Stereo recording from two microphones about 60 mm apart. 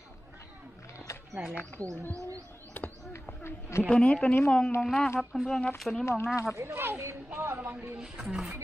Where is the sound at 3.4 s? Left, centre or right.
Left.